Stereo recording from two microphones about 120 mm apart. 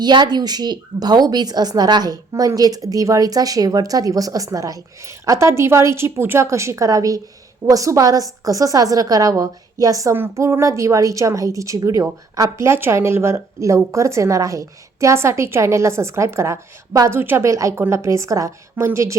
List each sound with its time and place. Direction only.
0.0 s a woman's voice: 35° right (ahead or behind)